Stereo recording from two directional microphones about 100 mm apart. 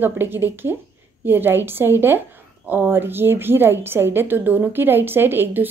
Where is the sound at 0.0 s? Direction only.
20° right (ahead or behind).